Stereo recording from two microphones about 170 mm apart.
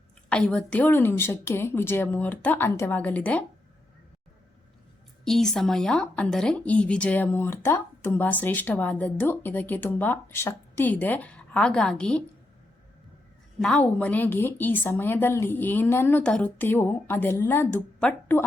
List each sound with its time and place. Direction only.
0.3 s speech: 5° left (ahead or behind)
5.2 s speech: centre (ahead or behind)
13.6 s speech: 5° left (ahead or behind)